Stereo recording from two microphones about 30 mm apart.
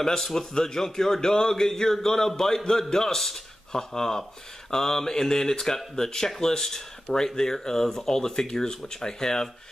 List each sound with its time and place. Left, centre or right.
0.2 s speech: centre